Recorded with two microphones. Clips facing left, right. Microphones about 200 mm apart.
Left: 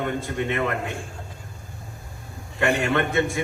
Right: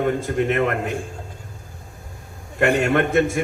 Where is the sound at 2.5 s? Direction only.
50° right (ahead or behind).